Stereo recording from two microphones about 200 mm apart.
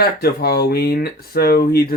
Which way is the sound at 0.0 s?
50° left (ahead or behind).